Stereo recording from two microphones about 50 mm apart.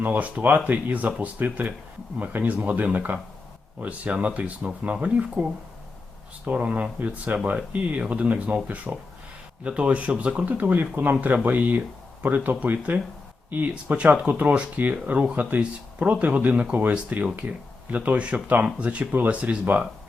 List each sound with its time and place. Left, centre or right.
0.0 s speech: right
14.3 s speech: right